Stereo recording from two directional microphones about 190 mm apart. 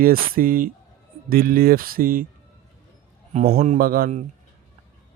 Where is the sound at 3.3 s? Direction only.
35° right (ahead or behind).